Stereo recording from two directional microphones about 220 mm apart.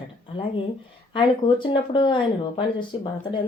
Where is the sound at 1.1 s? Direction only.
20° left (ahead or behind).